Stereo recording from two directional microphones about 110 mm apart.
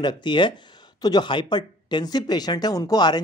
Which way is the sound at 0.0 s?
45° left (ahead or behind).